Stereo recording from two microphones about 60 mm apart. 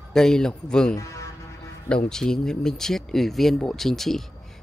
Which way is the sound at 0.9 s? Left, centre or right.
Left.